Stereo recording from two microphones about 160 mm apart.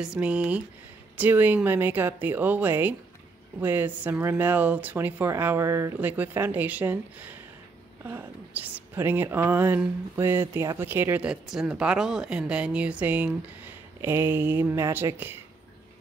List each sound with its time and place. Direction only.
0.0 s speech: 5° right (ahead or behind)